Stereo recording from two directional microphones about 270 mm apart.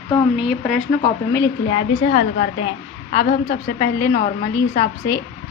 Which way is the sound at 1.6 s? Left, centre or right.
Left.